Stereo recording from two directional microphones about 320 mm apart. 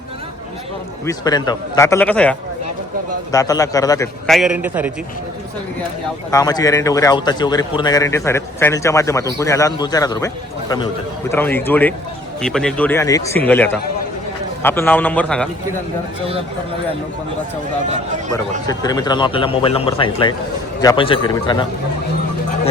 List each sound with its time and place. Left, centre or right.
1.0 s a man's voice: centre
3.3 s a man's voice: centre
6.3 s a man's voice: centre
18.7 s a man's voice: centre